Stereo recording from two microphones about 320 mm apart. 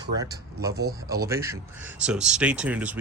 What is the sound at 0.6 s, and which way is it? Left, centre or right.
Speech, right.